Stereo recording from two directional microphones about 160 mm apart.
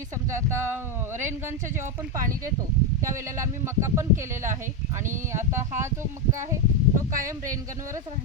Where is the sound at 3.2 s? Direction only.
15° right (ahead or behind).